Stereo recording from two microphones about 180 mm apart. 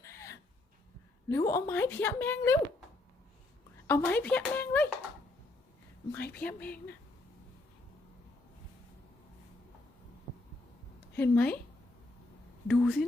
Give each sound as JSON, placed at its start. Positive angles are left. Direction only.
{"t": 0.0, "sound": "a sound", "side_deg": 15}
{"t": 1.3, "sound": "a woman's voice", "side_deg": 15}
{"t": 3.8, "sound": "a woman's voice", "side_deg": 10}
{"t": 6.3, "sound": "a woman's voice", "side_deg": 10}
{"t": 11.1, "sound": "a woman's voice", "side_deg": 10}
{"t": 12.6, "sound": "speech", "side_deg": 0}